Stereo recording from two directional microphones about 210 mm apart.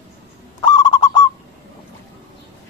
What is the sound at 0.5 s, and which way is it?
Honk, 20° left (ahead or behind).